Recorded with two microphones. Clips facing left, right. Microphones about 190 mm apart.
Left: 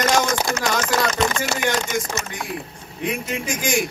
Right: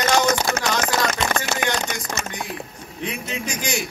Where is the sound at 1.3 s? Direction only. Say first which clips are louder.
Left 1 dB; 55° right (ahead or behind).